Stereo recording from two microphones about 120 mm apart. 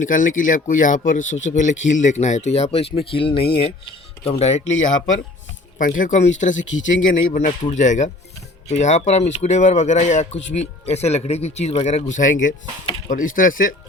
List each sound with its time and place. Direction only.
0.0 s speech: 90° left; by 4.6 s 65° left (ahead or behind)
5.9 s speech: 90° left
8.7 s speech: 75° left (ahead or behind); by 13.7 s 90° left